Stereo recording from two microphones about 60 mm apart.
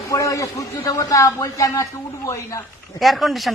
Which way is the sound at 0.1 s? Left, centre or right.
Left.